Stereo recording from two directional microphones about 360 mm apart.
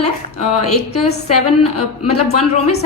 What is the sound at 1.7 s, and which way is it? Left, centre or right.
Speech, left.